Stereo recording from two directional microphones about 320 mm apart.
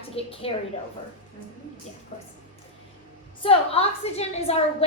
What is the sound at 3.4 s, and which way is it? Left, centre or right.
A woman's voice, centre.